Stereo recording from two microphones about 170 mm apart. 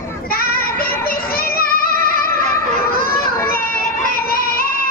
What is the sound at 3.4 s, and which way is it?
Children playing, 60° left (ahead or behind).